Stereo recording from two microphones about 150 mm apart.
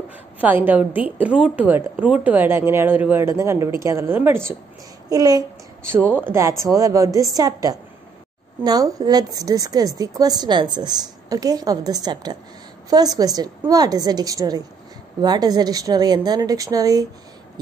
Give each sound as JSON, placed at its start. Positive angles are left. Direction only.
{"t": 0.4, "sound": "a woman's voice", "side_deg": -10}
{"t": 5.1, "sound": "a woman's voice", "side_deg": -25}
{"t": 6.0, "sound": "a woman's voice", "side_deg": -15}